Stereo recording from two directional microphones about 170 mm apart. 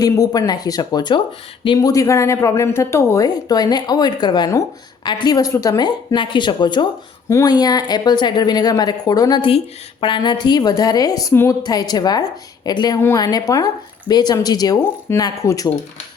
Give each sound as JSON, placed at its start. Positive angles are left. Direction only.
{"t": 0.0, "sound": "a woman's voice", "side_deg": 20}